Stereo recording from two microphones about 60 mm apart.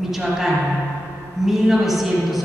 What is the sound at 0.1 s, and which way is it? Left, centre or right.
A woman's voice, centre.